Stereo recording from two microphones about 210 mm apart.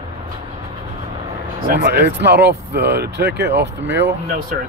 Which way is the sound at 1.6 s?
50° right (ahead or behind).